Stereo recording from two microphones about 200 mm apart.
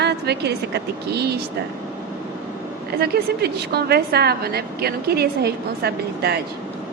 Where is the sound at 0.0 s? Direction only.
55° right (ahead or behind).